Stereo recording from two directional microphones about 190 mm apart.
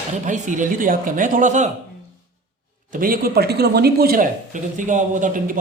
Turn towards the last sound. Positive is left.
turn(degrees=-45)  # may be behind; listen again after turning